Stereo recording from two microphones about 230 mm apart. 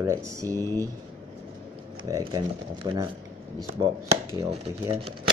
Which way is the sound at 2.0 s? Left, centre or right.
Centre.